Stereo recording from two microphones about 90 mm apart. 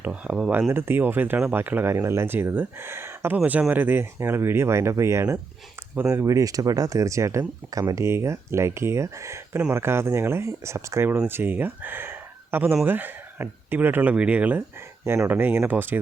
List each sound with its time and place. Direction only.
0.0 s speech: 15° right (ahead or behind)
0.7 s speech: 25° right (ahead or behind); by 8.0 s 40° right (ahead or behind)
8.0 s speech: 30° right (ahead or behind); by 14.6 s 15° right (ahead or behind)
15.0 s speech: 25° right (ahead or behind)